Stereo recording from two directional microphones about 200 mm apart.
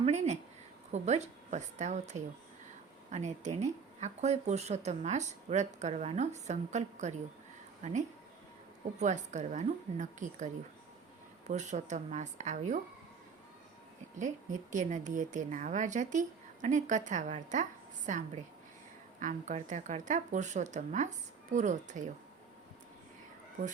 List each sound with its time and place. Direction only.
0.0 s speech: 35° right (ahead or behind)
14.2 s speech: 40° right (ahead or behind)
19.2 s speech: 40° right (ahead or behind)